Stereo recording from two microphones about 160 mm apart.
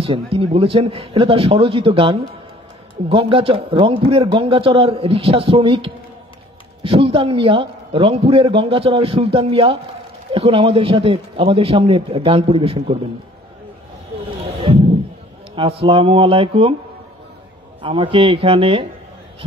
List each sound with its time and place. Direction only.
0.0 s a man's voice: 35° right (ahead or behind)
15.5 s a man's voice: 35° right (ahead or behind)
17.8 s a man's voice: 30° right (ahead or behind)